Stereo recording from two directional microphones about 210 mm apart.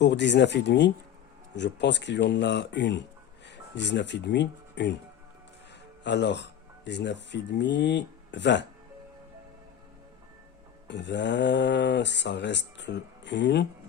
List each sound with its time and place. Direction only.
0.0 s speech: 55° left (ahead or behind)
6.0 s speech: 55° left (ahead or behind)
10.8 s speech: 55° left (ahead or behind)